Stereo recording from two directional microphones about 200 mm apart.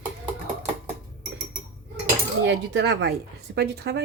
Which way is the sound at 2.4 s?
60° right (ahead or behind).